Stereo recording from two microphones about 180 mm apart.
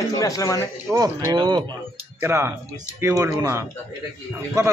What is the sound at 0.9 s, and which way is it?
Speech, 20° right (ahead or behind).